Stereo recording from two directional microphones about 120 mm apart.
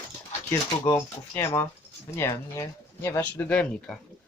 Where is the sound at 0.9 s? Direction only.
20° left (ahead or behind); by 4.0 s 5° left (ahead or behind).